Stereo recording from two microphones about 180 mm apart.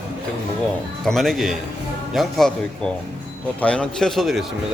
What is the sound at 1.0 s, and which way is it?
Speech, centre (ahead or behind).